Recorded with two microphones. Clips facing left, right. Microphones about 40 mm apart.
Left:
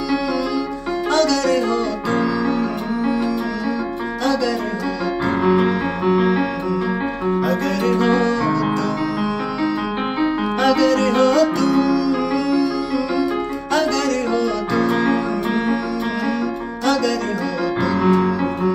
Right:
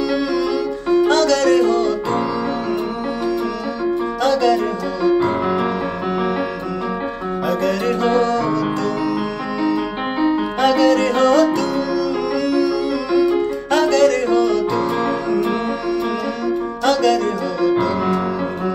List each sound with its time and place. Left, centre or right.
1.0 s music: right
4.2 s music: right
5.4 s music: centre
10.8 s music: right
13.7 s music: right
16.8 s music: right